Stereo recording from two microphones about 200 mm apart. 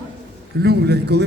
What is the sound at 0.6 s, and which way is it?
Speech, 55° right (ahead or behind).